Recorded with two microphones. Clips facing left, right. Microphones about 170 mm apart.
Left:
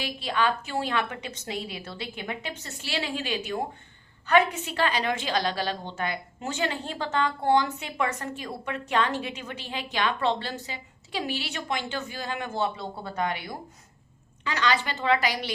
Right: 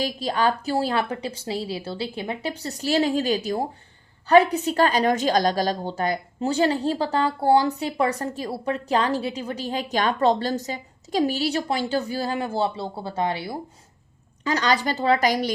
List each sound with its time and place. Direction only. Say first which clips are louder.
0.0 s a woman's voice: right 4 dB; 40° right (ahead or behind)